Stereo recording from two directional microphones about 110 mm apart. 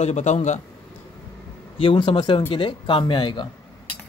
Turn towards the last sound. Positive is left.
turn(degrees=45)  # may be behind; listen again after turning